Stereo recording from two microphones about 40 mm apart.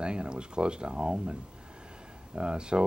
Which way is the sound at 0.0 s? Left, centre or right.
Right.